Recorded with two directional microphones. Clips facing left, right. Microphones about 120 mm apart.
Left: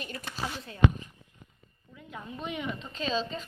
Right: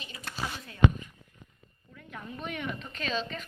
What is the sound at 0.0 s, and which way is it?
Speech, 50° left (ahead or behind).